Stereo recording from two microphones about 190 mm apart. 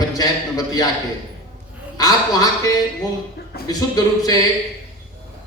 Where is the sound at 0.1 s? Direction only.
20° left (ahead or behind).